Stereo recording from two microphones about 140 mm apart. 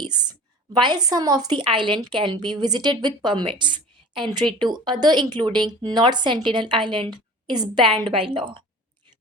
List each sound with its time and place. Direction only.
0.0 s a woman's voice: 30° right (ahead or behind)